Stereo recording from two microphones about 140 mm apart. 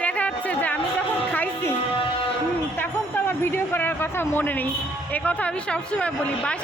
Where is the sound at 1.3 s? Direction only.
15° left (ahead or behind).